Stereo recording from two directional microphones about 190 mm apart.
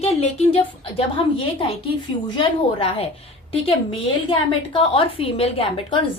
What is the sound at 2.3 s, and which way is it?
A woman's voice, 30° left (ahead or behind).